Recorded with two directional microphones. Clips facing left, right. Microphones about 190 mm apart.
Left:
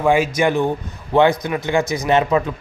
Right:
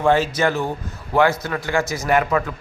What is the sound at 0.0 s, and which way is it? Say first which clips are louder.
Speech: left 2 dB; 10° left (ahead or behind).